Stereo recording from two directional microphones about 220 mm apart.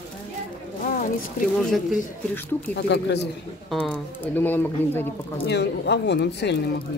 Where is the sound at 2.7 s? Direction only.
50° left (ahead or behind).